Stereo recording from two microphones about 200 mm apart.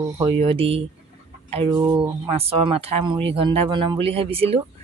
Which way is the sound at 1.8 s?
15° right (ahead or behind).